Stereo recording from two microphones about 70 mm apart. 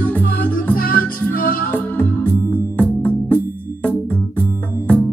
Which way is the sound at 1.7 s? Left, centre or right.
Left.